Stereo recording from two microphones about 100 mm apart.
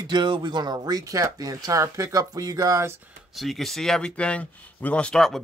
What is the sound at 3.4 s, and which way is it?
Speech, centre (ahead or behind).